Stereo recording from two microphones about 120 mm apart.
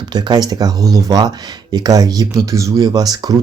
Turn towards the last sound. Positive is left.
turn(degrees=-30)  # may be behind; listen again after turning